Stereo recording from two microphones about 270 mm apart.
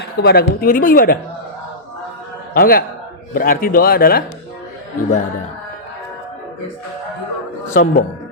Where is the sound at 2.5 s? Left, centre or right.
Left.